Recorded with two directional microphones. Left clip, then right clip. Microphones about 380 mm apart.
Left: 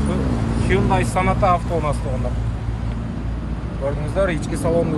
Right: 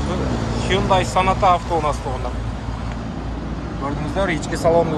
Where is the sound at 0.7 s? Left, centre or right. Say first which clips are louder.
Right 2 dB; centre.